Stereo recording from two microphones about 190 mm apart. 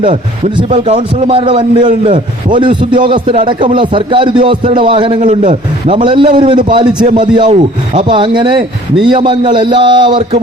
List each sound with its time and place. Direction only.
0.5 s a man's voice: 30° right (ahead or behind)
5.2 s a man's voice: 40° right (ahead or behind)
7.0 s a man's voice: 45° right (ahead or behind); by 10.4 s 25° right (ahead or behind)